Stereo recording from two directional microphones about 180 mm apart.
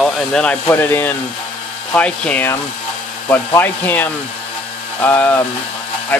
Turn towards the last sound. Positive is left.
turn(degrees=10)  # may be behind; listen again after turning